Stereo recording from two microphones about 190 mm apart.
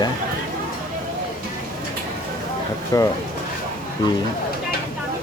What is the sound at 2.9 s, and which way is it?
Speech, 20° left (ahead or behind).